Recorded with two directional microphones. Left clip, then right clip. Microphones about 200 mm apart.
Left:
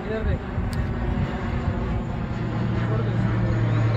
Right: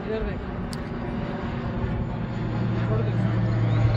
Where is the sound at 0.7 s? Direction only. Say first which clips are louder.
Left 3 dB; 35° left (ahead or behind).